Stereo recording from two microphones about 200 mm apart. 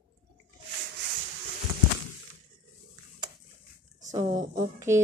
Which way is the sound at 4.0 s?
35° right (ahead or behind).